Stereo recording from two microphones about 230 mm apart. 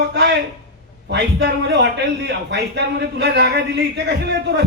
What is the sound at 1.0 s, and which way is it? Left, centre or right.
A man's voice, right.